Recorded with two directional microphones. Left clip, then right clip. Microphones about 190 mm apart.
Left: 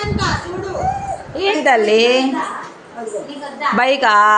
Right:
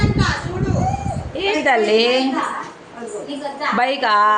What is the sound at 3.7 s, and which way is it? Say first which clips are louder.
Speech: left 4 dB; 15° left (ahead or behind).